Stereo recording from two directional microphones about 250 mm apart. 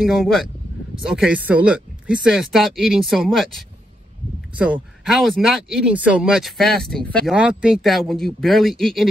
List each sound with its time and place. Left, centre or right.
0.0 s speech: centre
5.0 s speech: centre